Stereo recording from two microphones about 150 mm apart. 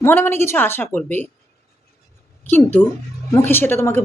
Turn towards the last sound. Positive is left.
turn(degrees=15)  # may be behind; listen again after turning